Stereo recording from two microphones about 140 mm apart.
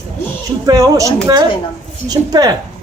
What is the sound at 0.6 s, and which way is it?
A man's voice, 25° right (ahead or behind).